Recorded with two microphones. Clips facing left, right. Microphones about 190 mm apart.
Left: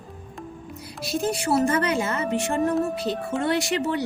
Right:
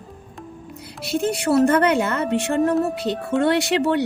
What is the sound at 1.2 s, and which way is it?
A woman's voice, 65° right (ahead or behind).